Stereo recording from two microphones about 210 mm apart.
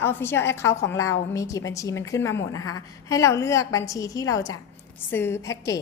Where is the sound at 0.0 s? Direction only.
10° left (ahead or behind).